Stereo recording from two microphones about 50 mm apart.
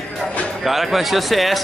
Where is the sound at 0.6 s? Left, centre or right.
Centre.